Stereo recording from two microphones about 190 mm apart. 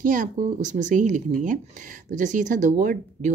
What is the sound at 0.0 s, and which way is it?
Speech, 45° right (ahead or behind).